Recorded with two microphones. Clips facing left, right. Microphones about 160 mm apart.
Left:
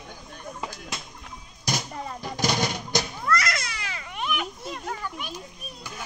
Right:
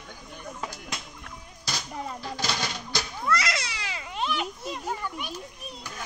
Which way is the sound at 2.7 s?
20° left (ahead or behind).